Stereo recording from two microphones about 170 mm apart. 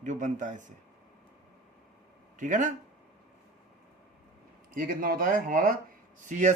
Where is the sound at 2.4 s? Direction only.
50° right (ahead or behind).